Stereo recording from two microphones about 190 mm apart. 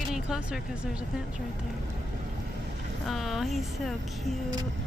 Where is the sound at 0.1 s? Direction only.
5° right (ahead or behind).